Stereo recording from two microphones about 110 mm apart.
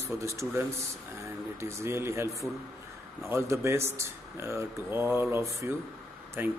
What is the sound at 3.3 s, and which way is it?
Speech, 25° right (ahead or behind).